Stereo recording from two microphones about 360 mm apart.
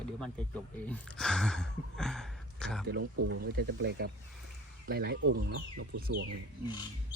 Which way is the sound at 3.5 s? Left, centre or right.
Right.